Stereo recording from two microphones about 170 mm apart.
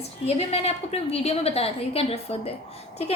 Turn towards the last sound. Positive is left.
turn(degrees=40)  # may be behind; listen again after turning